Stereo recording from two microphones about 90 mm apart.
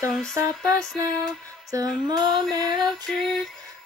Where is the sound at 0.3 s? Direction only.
35° right (ahead or behind).